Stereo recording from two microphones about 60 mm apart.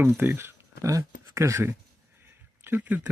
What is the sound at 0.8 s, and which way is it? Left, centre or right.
Speech, right.